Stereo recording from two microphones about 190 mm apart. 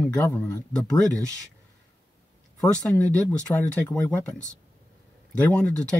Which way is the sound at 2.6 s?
5° left (ahead or behind).